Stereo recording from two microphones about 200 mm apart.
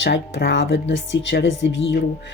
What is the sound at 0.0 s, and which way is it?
Speech, 60° left (ahead or behind).